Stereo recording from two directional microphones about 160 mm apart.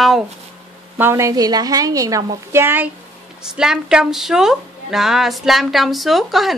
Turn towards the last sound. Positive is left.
turn(degrees=0)  # may be behind; listen again after turning